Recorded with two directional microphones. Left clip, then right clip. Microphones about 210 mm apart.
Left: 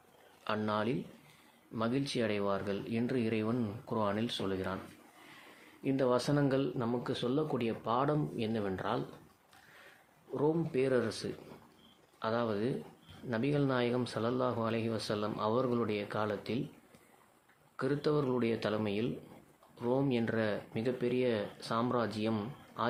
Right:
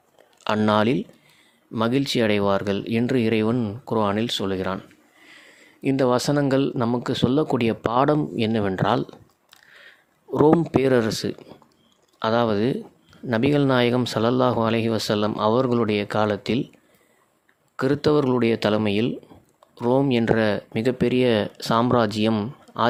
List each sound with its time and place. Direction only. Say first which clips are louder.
0.4 s speech: right 14 dB; 50° right (ahead or behind)
5.8 s speech: right 10 dB; 50° right (ahead or behind)
10.3 s speech: right 14 dB; 50° right (ahead or behind)
17.7 s speech: right 12 dB; 50° right (ahead or behind)